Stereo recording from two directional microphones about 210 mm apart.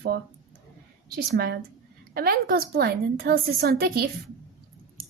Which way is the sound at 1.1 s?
50° right (ahead or behind).